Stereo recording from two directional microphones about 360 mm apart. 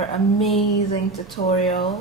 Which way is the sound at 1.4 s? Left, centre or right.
Centre.